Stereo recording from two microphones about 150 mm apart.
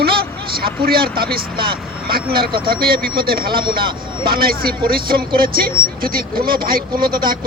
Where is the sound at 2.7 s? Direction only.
90° right.